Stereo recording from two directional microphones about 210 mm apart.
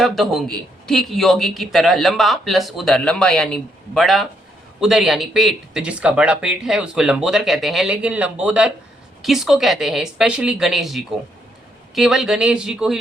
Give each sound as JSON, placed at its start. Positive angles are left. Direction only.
{"t": 0.0, "sound": "speech", "side_deg": 0}